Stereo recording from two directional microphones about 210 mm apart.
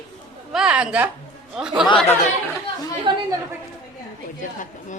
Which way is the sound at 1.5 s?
5° right (ahead or behind).